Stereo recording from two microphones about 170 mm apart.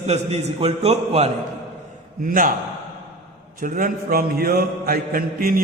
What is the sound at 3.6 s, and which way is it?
Mantra, 50° right (ahead or behind).